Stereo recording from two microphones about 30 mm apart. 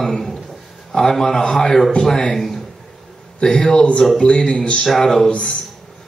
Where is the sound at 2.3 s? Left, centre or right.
Centre.